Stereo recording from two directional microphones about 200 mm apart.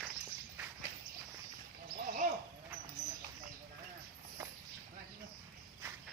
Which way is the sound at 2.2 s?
40° right (ahead or behind).